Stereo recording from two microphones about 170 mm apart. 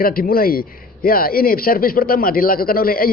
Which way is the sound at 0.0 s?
60° left (ahead or behind).